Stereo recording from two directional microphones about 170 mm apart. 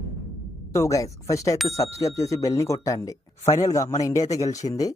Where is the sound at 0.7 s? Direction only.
15° left (ahead or behind).